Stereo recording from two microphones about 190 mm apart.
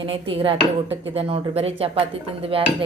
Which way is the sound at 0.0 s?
30° right (ahead or behind).